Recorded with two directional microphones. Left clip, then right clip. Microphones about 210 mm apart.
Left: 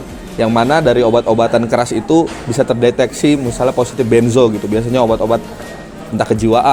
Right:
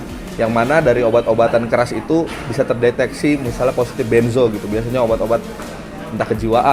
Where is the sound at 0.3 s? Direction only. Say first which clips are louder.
Left 2 dB; 55° left (ahead or behind).